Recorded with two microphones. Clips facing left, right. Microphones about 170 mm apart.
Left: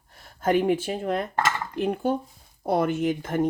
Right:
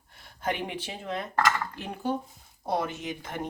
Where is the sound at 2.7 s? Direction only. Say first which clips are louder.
Left 7 dB; 55° left (ahead or behind).